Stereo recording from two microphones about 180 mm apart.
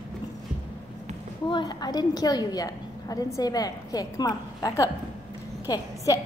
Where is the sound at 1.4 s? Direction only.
25° left (ahead or behind).